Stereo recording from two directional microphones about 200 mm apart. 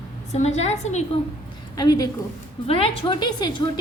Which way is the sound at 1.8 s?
20° left (ahead or behind).